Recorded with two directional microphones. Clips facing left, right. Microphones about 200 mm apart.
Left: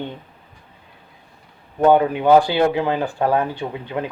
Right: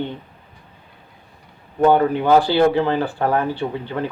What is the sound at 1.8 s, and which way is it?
Speech, 10° left (ahead or behind).